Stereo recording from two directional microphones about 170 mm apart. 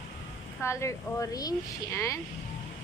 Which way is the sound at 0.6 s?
15° left (ahead or behind).